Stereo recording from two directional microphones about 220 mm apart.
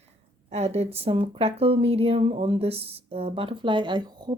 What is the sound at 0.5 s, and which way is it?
Speech, 30° right (ahead or behind).